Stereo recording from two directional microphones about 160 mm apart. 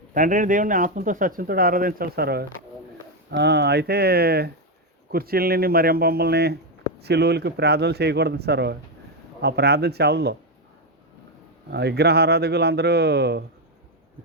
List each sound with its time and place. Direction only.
0.1 s speech: 55° right (ahead or behind); by 2.5 s 75° right (ahead or behind)
3.2 s speech: 90° right
11.7 s speech: 90° right